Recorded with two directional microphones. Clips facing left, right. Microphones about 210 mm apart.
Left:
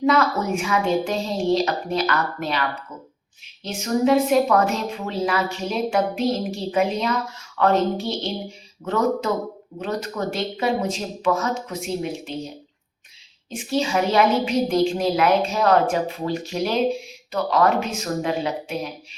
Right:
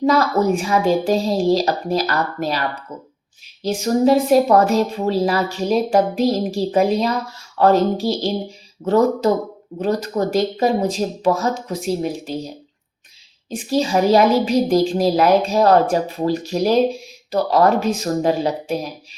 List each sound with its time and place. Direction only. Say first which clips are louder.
0.0 s a woman's voice: right 4 dB; 35° right (ahead or behind)
13.5 s a woman's voice: right 4 dB; 35° right (ahead or behind)